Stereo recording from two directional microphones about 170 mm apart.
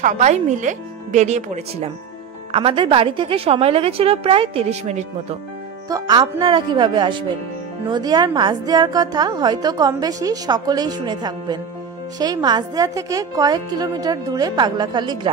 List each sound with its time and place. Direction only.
0.0 s speech: 45° right (ahead or behind)
2.5 s a woman's voice: 30° right (ahead or behind)
5.9 s a woman's voice: 20° right (ahead or behind)